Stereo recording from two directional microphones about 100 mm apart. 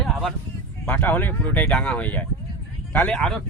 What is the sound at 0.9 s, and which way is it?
Speech, 20° left (ahead or behind).